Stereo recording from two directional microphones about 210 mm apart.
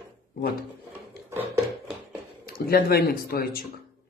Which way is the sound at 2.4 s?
45° left (ahead or behind).